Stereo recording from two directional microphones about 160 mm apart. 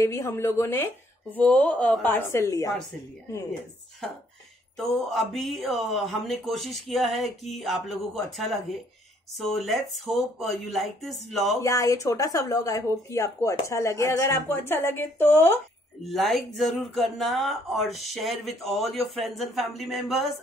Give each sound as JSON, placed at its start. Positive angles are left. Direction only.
{"t": 0.0, "sound": "a woman's voice", "side_deg": 15}
{"t": 4.9, "sound": "speech", "side_deg": 0}
{"t": 9.7, "sound": "speech", "side_deg": 0}
{"t": 11.6, "sound": "speech", "side_deg": 20}
{"t": 16.1, "sound": "speech", "side_deg": 0}